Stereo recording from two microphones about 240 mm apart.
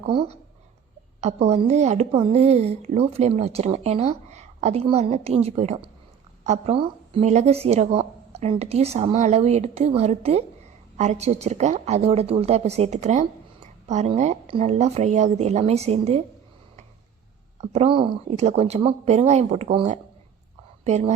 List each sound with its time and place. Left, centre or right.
0.0 s a woman's voice: right
17.6 s a woman's voice: right